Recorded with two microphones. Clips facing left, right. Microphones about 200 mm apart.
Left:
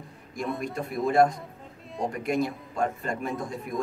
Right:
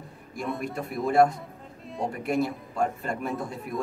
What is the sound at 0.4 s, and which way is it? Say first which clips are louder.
A man's voice: left 1 dB; 5° right (ahead or behind).